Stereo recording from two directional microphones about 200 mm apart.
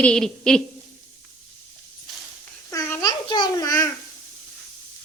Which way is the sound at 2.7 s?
15° left (ahead or behind).